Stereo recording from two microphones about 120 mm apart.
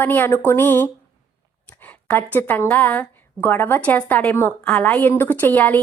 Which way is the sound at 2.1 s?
15° left (ahead or behind).